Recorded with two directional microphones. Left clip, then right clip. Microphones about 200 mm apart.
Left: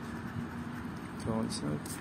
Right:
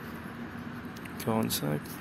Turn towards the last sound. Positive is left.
turn(degrees=-35)  # may be behind; listen again after turning